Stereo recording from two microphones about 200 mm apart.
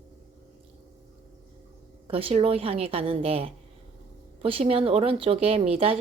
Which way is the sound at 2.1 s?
30° right (ahead or behind).